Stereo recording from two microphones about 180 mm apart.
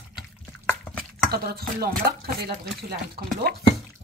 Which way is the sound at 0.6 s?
5° left (ahead or behind).